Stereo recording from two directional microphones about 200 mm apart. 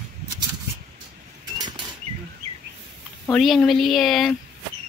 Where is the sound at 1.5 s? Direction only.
20° right (ahead or behind).